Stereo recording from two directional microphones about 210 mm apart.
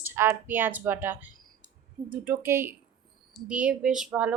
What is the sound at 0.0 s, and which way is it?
Speech, 10° right (ahead or behind).